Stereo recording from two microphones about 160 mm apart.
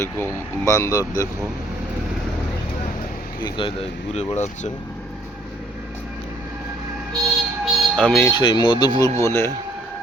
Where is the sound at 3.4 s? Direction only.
30° left (ahead or behind).